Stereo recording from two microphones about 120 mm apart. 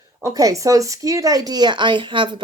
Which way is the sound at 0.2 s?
25° right (ahead or behind).